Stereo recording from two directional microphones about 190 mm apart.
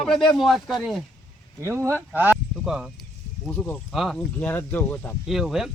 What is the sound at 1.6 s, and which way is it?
Speech, 15° right (ahead or behind).